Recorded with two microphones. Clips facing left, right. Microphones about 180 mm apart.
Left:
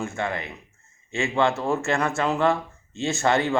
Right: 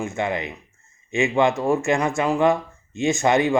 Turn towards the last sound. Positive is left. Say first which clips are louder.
# right 3 dB
turn(degrees=-15)  # may be behind; listen again after turning